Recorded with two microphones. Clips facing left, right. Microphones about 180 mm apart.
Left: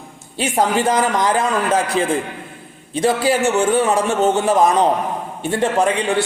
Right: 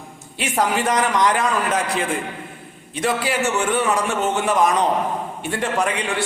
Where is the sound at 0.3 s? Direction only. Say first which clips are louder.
Left 3 dB; 30° left (ahead or behind).